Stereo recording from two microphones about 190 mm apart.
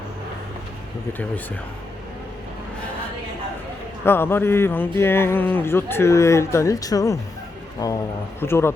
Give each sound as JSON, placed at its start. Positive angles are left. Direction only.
{"t": 4.0, "sound": "speech", "side_deg": 10}